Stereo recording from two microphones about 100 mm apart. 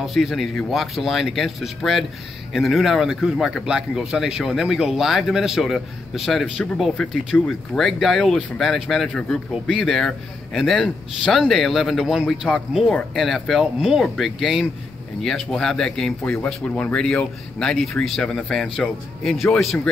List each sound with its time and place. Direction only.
0.0 s a man's voice: centre (ahead or behind)